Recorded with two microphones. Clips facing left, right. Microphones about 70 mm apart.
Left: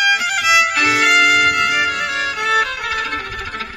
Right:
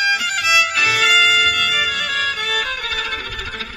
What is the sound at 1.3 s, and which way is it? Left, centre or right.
Music, left.